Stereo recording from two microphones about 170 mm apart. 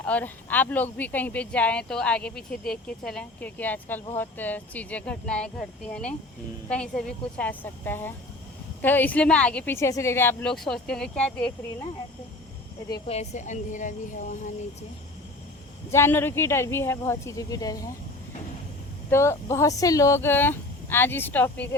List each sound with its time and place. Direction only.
0.0 s speech: 10° left (ahead or behind)
13.1 s a woman's voice: 40° left (ahead or behind)
15.9 s speech: 15° left (ahead or behind)
19.1 s speech: 15° left (ahead or behind)